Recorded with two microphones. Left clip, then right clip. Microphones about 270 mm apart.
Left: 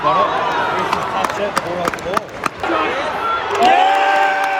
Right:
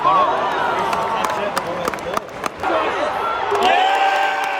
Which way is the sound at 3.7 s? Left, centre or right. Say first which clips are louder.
Left 3 dB; centre.